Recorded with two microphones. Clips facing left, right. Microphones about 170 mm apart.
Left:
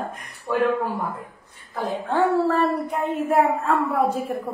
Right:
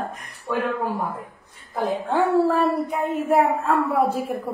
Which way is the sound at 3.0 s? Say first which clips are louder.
Even; centre (ahead or behind).